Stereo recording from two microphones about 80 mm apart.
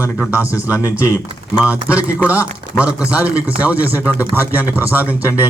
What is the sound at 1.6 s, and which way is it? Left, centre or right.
A man's voice, centre.